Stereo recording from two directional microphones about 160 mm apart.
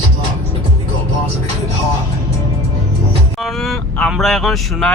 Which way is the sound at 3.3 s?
Centre (ahead or behind).